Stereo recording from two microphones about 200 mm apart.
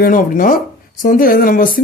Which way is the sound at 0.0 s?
45° left (ahead or behind).